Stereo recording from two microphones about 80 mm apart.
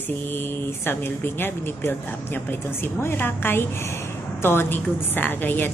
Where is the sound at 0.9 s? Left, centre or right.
Left.